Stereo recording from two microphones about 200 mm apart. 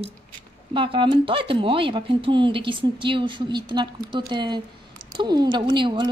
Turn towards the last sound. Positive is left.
turn(degrees=-25)  # may be behind; listen again after turning